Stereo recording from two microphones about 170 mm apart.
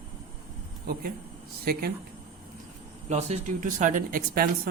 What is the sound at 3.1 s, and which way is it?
Speech, 45° right (ahead or behind).